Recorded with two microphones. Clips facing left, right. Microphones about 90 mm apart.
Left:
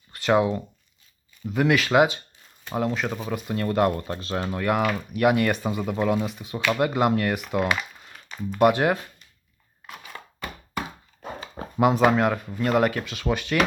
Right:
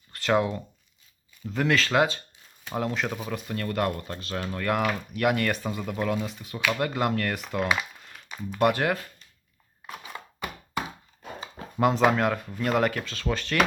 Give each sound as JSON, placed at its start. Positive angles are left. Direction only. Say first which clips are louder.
{"t": 0.1, "sound": "speech", "louder": "left 3 dB", "side_deg": 10}
{"t": 2.6, "sound": "speech", "louder": "left 3 dB", "side_deg": 0}
{"t": 3.2, "sound": "speech", "louder": "left 4 dB", "side_deg": 15}
{"t": 4.6, "sound": "speech", "louder": "left 2 dB", "side_deg": 5}
{"t": 5.9, "sound": "speech", "louder": "left 4 dB", "side_deg": 20}
{"t": 7.9, "sound": "music", "louder": "left 1 dB", "side_deg": 0}
{"t": 8.5, "sound": "speech", "louder": "left 4 dB", "side_deg": 15}
{"t": 9.8, "sound": "chopping", "louder": "right 1 dB", "side_deg": -10}
{"t": 11.8, "sound": "speech", "louder": "left 3 dB", "side_deg": 5}